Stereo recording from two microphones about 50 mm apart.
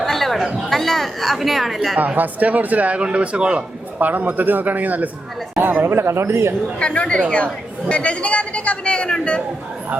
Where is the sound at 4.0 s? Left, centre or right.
Right.